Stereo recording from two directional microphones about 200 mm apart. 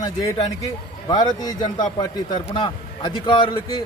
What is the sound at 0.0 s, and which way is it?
A man's voice, 20° left (ahead or behind).